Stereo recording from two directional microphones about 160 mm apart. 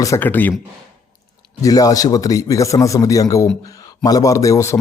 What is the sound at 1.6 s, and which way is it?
Speech, 20° left (ahead or behind).